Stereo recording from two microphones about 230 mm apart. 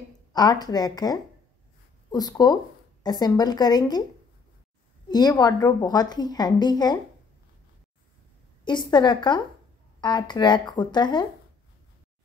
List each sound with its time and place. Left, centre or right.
0.3 s a woman's voice: centre
5.0 s a woman's voice: centre
8.6 s speech: centre